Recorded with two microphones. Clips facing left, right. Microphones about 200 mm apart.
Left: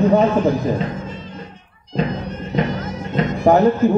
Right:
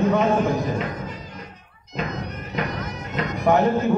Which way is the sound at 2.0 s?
30° left (ahead or behind).